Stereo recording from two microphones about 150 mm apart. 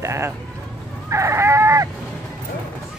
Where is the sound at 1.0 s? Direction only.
20° right (ahead or behind).